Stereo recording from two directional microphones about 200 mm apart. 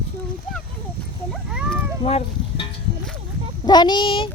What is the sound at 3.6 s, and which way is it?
Speech, 20° left (ahead or behind).